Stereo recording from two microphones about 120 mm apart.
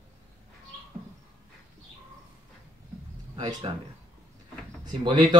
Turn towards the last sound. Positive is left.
turn(degrees=-40)  # may be behind; listen again after turning